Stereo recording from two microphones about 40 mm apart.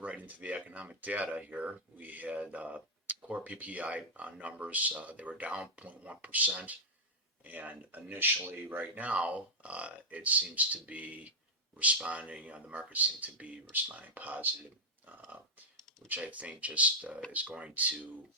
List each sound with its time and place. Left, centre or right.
0.0 s speech: right
9.0 s speech: right
16.0 s speech: right